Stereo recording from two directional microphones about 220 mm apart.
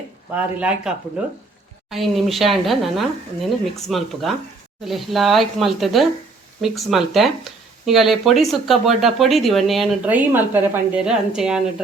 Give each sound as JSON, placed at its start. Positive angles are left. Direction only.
{"t": 0.3, "sound": "speech", "side_deg": -5}